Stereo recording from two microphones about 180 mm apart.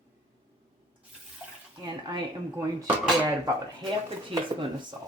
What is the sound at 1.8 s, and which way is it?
Speech, 25° right (ahead or behind).